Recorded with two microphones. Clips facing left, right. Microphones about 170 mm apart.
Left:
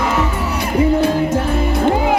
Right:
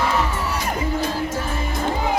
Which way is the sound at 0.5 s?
65° left (ahead or behind).